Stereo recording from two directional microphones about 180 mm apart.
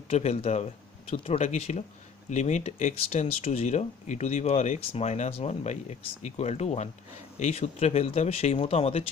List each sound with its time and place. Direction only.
0.1 s speech: 35° left (ahead or behind)